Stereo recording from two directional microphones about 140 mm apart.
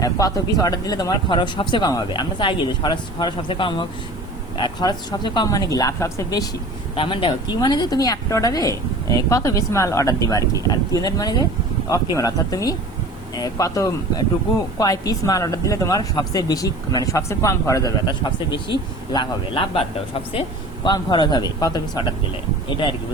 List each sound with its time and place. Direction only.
0.0 s speech: 25° left (ahead or behind)
6.9 s speech: 35° left (ahead or behind)